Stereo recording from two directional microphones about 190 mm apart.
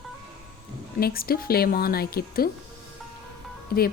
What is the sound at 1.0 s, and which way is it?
Speech, 50° left (ahead or behind).